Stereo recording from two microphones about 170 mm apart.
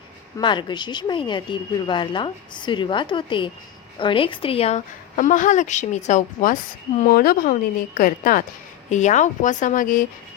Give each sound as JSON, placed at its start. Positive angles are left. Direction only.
{"t": 0.3, "sound": "a woman's voice", "side_deg": 25}
{"t": 5.1, "sound": "a woman's voice", "side_deg": 50}
{"t": 7.0, "sound": "a woman's voice", "side_deg": 60}